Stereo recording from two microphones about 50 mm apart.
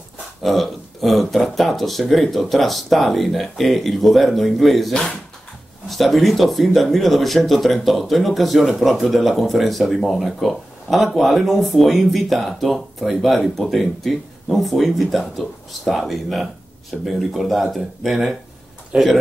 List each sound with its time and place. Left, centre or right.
0.4 s speech: centre
18.9 s speech: right